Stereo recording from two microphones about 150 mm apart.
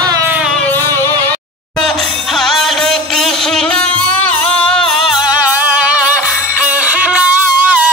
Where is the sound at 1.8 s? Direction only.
Centre (ahead or behind).